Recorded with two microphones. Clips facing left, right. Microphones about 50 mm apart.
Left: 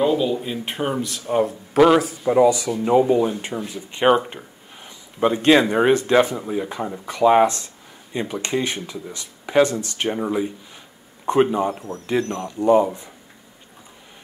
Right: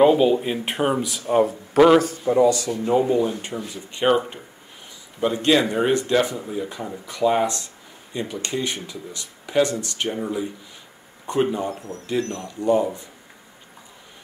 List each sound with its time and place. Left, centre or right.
0.0 s speech: right; by 2.1 s centre
2.2 s speech: centre
5.2 s speech: left
11.5 s speech: left